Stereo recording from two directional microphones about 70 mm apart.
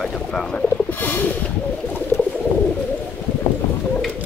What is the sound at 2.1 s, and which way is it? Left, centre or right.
Bird, left.